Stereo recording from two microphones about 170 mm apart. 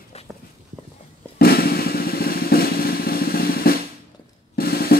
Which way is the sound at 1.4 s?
65° left (ahead or behind).